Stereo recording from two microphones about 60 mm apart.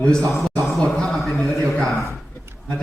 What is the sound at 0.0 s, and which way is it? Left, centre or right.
Speech, centre.